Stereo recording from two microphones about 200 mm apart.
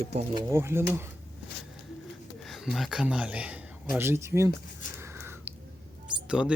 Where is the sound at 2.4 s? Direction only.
Centre (ahead or behind).